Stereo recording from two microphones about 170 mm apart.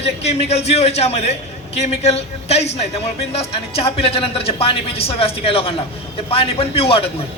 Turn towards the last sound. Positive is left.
turn(degrees=35)  # may be behind; listen again after turning